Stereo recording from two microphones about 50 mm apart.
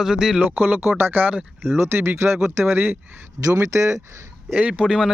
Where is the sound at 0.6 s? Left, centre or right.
Right.